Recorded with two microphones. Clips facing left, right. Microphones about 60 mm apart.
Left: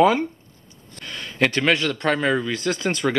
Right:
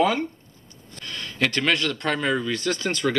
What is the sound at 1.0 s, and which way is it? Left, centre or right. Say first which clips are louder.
Speech: left 3 dB; centre.